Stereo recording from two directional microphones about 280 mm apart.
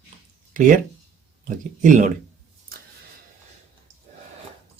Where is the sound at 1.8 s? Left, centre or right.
Right.